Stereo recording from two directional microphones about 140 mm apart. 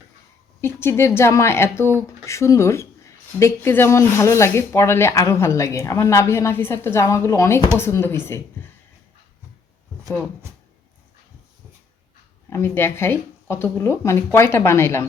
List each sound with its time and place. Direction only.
0.6 s speech: 15° left (ahead or behind)
12.5 s speech: 20° left (ahead or behind)